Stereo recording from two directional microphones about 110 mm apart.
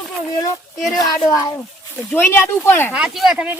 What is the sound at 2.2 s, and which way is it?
Speech, 20° left (ahead or behind).